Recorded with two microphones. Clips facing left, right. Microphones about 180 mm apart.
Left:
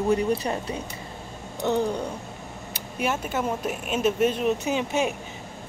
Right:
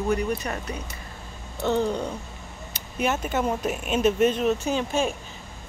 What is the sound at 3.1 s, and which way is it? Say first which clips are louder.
Speech: right 2 dB; 5° left (ahead or behind).